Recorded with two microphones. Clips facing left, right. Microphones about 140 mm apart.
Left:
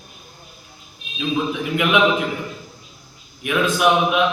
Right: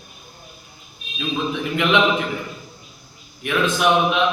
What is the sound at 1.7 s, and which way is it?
Speech, 10° left (ahead or behind).